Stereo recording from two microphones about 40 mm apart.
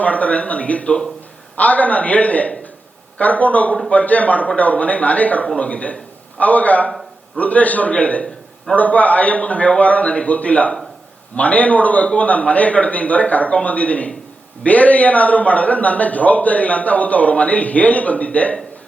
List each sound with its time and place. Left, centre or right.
0.0 s a man's voice: left